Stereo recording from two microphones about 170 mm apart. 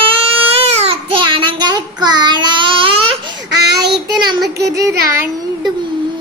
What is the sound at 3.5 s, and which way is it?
Child singing, 80° right.